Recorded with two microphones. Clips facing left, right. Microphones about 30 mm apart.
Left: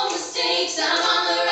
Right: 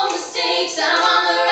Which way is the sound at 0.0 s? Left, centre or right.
Centre.